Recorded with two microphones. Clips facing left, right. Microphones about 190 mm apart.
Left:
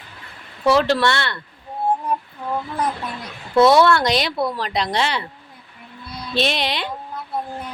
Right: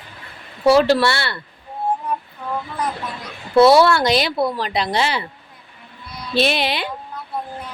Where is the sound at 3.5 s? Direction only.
5° right (ahead or behind).